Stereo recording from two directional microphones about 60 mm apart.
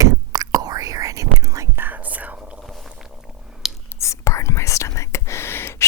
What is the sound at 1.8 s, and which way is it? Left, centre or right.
Whispering, right.